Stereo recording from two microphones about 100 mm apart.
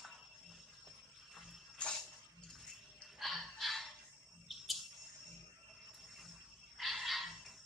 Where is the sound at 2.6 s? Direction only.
Centre (ahead or behind).